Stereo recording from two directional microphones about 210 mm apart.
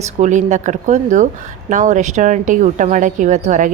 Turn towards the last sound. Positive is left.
turn(degrees=-35)  # may be behind; listen again after turning